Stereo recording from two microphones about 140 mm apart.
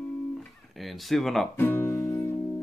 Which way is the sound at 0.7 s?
Centre (ahead or behind).